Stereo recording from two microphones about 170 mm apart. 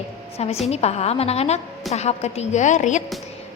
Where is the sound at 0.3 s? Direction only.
40° left (ahead or behind).